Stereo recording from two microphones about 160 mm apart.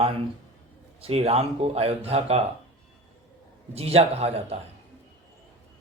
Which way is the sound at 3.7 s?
40° right (ahead or behind).